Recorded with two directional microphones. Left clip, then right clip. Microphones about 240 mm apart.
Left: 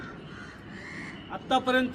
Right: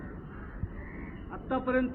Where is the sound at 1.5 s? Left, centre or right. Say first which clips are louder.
Left 5 dB; left.